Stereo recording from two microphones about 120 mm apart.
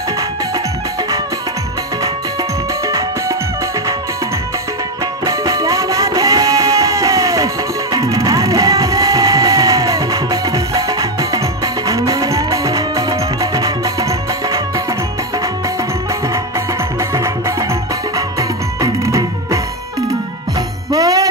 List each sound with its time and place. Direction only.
2.9 s music: 25° right (ahead or behind)
5.2 s music: 30° right (ahead or behind)
17.1 s music: 25° right (ahead or behind)
20.9 s music: 30° right (ahead or behind)